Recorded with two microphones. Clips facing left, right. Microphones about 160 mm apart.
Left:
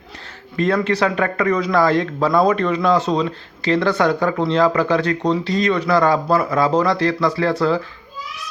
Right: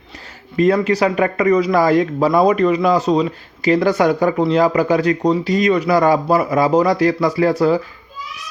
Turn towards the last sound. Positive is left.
turn(degrees=-15)  # may be behind; listen again after turning